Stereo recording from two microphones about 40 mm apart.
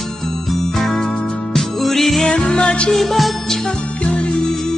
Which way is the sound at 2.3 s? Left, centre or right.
Left.